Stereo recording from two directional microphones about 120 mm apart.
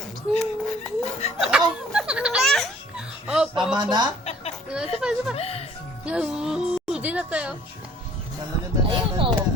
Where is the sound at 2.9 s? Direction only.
5° right (ahead or behind).